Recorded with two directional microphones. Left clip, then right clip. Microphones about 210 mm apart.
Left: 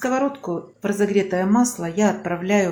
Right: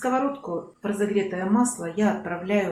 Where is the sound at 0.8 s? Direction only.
45° left (ahead or behind).